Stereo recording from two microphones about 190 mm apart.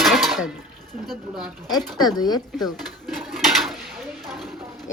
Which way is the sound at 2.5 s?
Centre (ahead or behind).